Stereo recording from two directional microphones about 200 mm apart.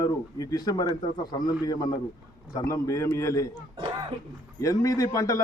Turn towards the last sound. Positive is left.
turn(degrees=15)  # may be behind; listen again after turning